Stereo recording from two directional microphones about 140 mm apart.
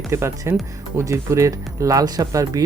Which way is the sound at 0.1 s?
20° right (ahead or behind).